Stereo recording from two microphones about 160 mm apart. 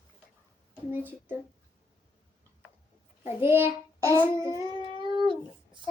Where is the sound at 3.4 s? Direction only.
15° right (ahead or behind).